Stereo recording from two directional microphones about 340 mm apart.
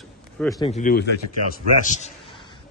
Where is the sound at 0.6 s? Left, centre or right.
Left.